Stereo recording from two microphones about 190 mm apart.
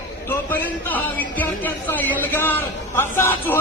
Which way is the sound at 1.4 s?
10° left (ahead or behind).